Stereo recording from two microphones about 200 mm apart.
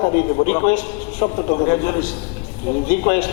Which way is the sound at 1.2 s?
30° left (ahead or behind).